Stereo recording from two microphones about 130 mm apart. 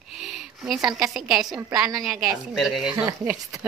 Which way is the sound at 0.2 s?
5° right (ahead or behind).